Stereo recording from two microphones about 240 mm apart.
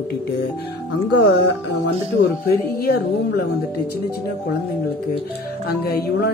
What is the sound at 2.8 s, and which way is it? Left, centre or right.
Speech, left.